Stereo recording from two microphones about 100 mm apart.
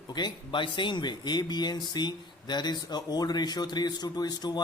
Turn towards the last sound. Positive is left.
turn(degrees=45)  # may be behind; listen again after turning